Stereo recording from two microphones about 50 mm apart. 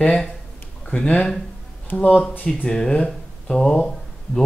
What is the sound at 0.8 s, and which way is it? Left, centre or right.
Speech, left.